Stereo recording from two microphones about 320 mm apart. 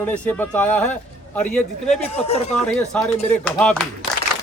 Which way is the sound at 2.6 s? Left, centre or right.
Centre.